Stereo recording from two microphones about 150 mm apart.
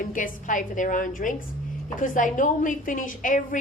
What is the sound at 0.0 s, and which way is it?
A woman's voice, 65° left (ahead or behind).